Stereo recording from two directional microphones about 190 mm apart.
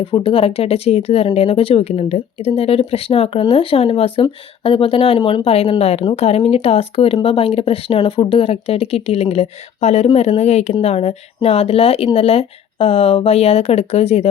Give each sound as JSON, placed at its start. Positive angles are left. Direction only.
{"t": 0.0, "sound": "speech", "side_deg": 30}